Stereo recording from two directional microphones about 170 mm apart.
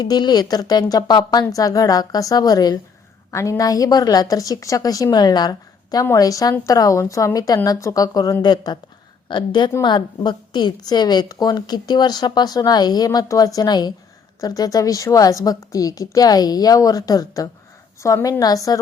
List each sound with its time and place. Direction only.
0.0 s a woman's voice: 25° left (ahead or behind)